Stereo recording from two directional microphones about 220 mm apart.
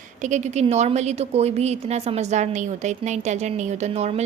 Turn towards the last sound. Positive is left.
turn(degrees=-30)  # may be behind; listen again after turning